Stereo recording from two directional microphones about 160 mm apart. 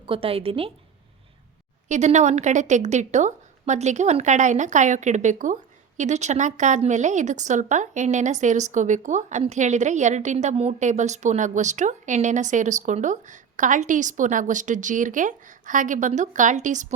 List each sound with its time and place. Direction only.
0.0 s a woman's voice: 35° right (ahead or behind)
1.9 s speech: 45° right (ahead or behind)